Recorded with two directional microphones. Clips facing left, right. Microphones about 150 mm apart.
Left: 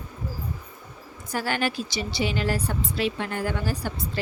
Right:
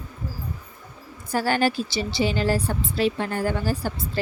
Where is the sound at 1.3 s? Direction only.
40° right (ahead or behind).